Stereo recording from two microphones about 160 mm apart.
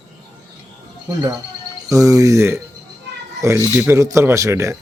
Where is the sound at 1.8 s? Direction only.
20° right (ahead or behind).